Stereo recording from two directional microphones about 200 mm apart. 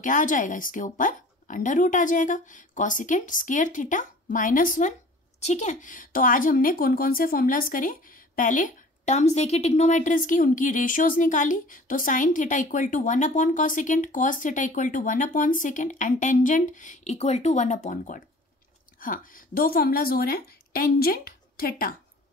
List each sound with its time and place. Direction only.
0.0 s a woman's voice: 40° left (ahead or behind)